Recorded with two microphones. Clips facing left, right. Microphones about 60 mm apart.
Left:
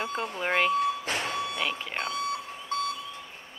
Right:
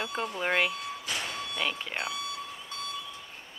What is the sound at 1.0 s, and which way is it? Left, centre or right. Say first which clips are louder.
Reversing beeps: left 5 dB; left.